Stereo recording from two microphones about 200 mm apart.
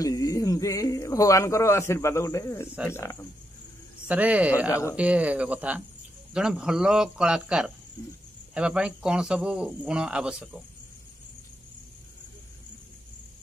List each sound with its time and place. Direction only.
0.0 s speech: 15° left (ahead or behind)
4.1 s speech: 5° right (ahead or behind)
4.6 s speech: 15° left (ahead or behind)
4.9 s speech: 5° right (ahead or behind)